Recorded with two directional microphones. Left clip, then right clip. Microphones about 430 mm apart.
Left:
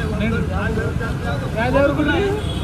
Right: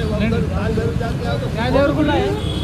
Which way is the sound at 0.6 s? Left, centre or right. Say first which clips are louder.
Right 2 dB; centre.